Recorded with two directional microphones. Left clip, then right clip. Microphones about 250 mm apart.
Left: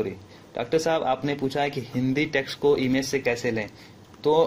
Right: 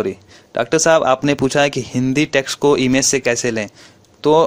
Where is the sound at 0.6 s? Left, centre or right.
Right.